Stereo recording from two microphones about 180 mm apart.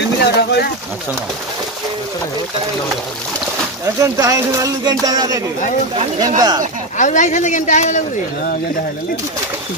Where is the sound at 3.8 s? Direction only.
20° right (ahead or behind).